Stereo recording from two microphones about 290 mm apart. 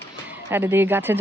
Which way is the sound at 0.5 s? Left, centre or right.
Centre.